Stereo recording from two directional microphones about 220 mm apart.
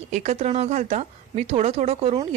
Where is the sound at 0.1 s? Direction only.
30° right (ahead or behind).